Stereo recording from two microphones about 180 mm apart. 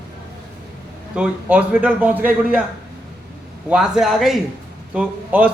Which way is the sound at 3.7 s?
5° right (ahead or behind).